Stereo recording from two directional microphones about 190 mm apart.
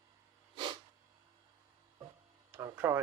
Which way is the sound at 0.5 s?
25° right (ahead or behind).